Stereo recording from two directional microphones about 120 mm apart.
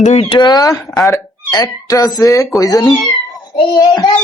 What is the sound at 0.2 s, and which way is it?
A child's voice, 45° left (ahead or behind).